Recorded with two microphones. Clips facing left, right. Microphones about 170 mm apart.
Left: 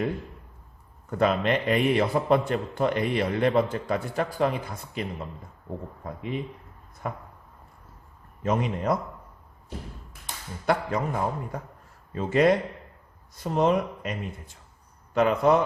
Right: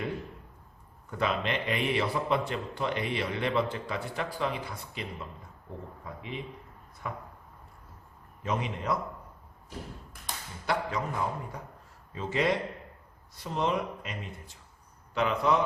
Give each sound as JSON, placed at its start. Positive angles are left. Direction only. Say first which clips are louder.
{"t": 1.2, "sound": "a man's voice", "louder": "left 7 dB", "side_deg": 50}
{"t": 7.0, "sound": "a man's voice", "louder": "left 4 dB", "side_deg": 50}
{"t": 8.4, "sound": "a man's voice", "louder": "left 6 dB", "side_deg": 45}
{"t": 10.7, "sound": "a man's voice", "louder": "left 5 dB", "side_deg": 50}